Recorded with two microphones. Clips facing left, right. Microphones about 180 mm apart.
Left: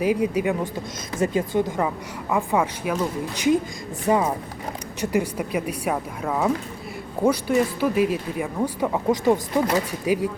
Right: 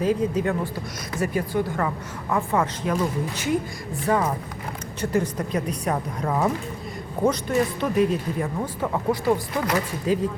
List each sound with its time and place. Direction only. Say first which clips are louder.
0.0 s speech: left 1 dB; 10° left (ahead or behind)